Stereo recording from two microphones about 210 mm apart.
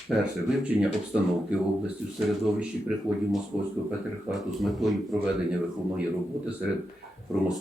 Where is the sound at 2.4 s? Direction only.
5° right (ahead or behind).